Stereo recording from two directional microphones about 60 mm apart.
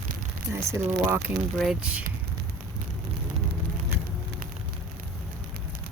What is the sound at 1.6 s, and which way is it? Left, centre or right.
Speech, centre.